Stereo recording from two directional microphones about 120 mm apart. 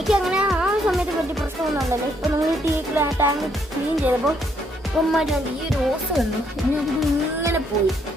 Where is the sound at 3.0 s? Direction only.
20° right (ahead or behind).